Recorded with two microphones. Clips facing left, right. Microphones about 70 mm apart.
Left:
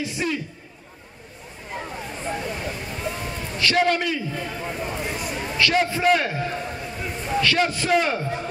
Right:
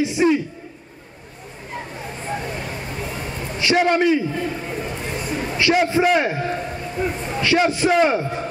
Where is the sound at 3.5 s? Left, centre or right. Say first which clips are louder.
Right 3 dB; centre.